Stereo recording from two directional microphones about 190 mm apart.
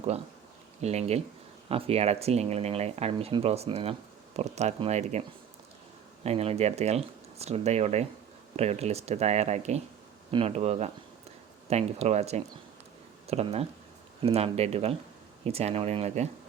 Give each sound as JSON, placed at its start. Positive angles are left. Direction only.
{"t": 0.8, "sound": "speech", "side_deg": -35}
{"t": 6.2, "sound": "speech", "side_deg": -30}